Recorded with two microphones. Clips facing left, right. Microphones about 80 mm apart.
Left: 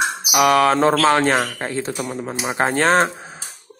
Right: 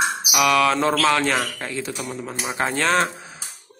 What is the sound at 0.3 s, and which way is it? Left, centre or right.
Speech, left.